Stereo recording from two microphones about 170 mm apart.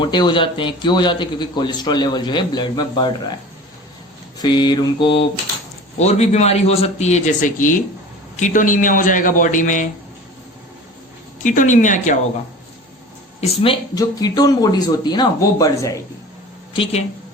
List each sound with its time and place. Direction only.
0.0 s a man's voice: 25° left (ahead or behind)
4.4 s a man's voice: 25° left (ahead or behind); by 9.9 s 50° left (ahead or behind)
11.4 s a man's voice: 50° left (ahead or behind)
13.4 s a man's voice: 35° left (ahead or behind)
13.9 s a man's voice: 20° left (ahead or behind)
16.7 s a man's voice: 30° left (ahead or behind)